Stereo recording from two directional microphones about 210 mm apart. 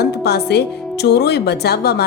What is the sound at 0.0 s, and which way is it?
Speech, 50° left (ahead or behind).